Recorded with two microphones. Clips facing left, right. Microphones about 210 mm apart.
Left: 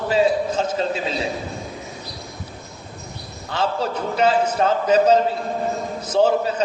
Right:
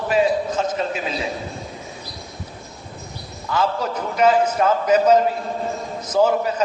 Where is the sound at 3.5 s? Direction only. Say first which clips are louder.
Right 1 dB; 30° left (ahead or behind).